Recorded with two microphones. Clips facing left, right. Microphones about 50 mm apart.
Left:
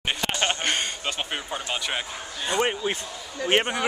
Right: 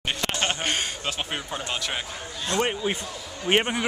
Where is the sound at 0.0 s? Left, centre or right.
Centre.